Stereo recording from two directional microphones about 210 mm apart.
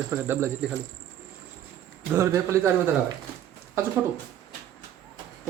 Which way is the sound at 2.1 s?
15° right (ahead or behind).